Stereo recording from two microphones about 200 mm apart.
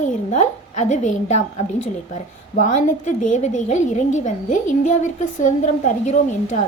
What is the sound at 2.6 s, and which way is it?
A woman's voice, 35° left (ahead or behind).